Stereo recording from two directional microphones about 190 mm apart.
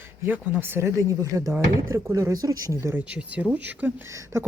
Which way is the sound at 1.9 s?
15° right (ahead or behind).